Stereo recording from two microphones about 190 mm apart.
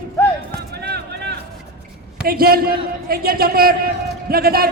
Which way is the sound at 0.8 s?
60° right (ahead or behind).